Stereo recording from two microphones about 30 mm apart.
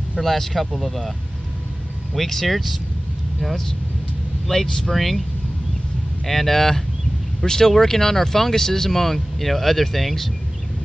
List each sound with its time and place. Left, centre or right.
0.2 s speech: centre
2.1 s speech: centre
4.5 s speech: centre
6.2 s speech: centre